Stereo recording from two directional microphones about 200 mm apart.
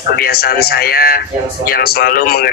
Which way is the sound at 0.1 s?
50° left (ahead or behind).